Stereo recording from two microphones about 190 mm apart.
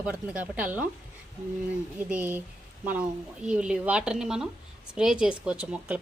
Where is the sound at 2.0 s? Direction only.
5° right (ahead or behind).